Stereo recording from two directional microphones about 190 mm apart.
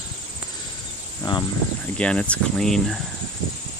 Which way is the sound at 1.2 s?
25° left (ahead or behind).